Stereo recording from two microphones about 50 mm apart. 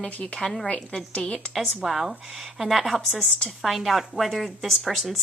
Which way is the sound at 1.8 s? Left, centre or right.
Centre.